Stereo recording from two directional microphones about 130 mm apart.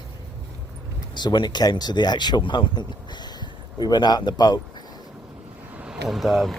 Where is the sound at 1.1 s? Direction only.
35° left (ahead or behind).